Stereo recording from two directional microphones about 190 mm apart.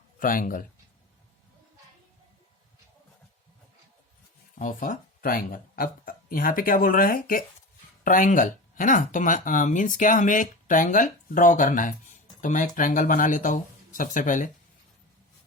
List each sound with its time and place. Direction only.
0.2 s speech: 45° left (ahead or behind)
4.5 s speech: 45° left (ahead or behind)